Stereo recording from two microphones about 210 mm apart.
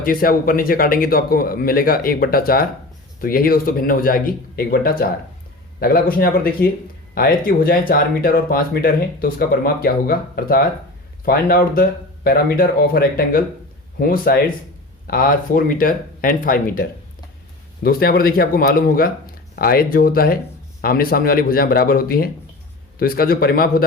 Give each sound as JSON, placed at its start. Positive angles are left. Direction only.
{"t": 0.0, "sound": "speech", "side_deg": 45}
{"t": 17.8, "sound": "speech", "side_deg": 45}